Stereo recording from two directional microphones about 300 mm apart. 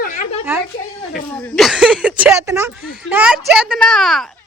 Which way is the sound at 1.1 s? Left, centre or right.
Centre.